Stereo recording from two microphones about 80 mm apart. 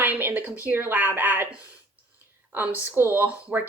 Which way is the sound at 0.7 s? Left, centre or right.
Right.